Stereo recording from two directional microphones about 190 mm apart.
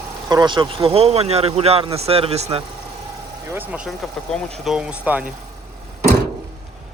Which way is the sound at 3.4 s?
10° right (ahead or behind).